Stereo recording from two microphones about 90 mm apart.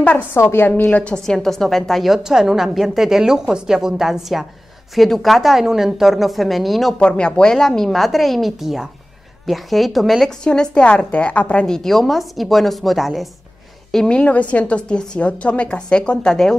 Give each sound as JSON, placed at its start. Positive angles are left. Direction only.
{"t": 0.0, "sound": "a woman's voice", "side_deg": 15}
{"t": 0.4, "sound": "a woman's voice", "side_deg": 25}
{"t": 13.9, "sound": "a woman's voice", "side_deg": 10}